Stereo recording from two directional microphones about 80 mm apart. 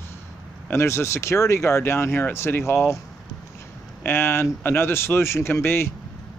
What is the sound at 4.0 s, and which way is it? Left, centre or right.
Speech, left.